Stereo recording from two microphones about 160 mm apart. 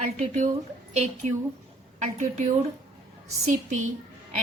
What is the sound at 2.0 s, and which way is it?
Speech, 50° right (ahead or behind).